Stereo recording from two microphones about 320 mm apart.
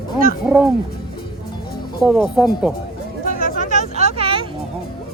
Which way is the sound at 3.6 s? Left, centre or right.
Right.